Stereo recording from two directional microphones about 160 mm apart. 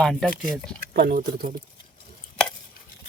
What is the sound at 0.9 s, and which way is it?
Speech, 80° right.